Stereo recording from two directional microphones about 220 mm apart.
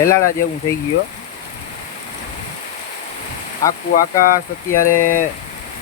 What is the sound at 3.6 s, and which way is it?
Speech, 15° left (ahead or behind).